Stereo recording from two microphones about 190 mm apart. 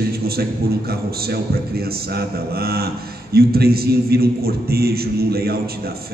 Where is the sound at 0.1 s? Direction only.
55° right (ahead or behind).